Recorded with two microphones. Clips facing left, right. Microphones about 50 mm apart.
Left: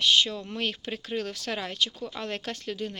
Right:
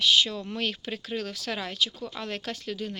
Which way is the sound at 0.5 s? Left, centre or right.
Left.